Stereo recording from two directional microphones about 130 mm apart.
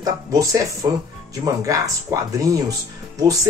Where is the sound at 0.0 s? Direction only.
25° right (ahead or behind).